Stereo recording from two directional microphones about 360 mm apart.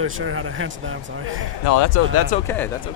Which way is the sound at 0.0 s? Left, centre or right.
Right.